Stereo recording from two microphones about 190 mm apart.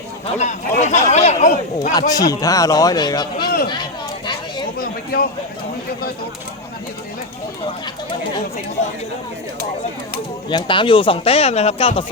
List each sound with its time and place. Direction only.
0.3 s speech: 40° left (ahead or behind)
1.9 s a man's voice: 20° left (ahead or behind)
10.5 s a man's voice: 25° left (ahead or behind)